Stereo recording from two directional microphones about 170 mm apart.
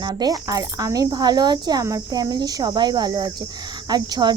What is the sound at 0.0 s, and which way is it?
Speech, 25° right (ahead or behind).